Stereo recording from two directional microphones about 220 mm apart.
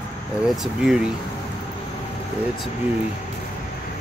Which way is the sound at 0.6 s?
Centre (ahead or behind).